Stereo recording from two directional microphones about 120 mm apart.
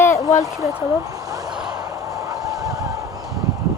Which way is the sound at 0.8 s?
30° right (ahead or behind).